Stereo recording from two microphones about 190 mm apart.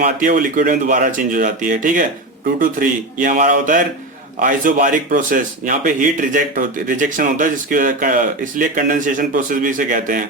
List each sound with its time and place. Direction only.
0.0 s speech: 45° right (ahead or behind)